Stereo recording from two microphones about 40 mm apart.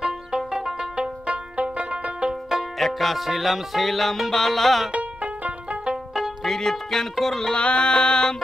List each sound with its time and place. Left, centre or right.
0.0 s music: centre
0.9 s music: right
2.8 s music: centre
4.9 s music: right
6.4 s music: centre
7.5 s music: left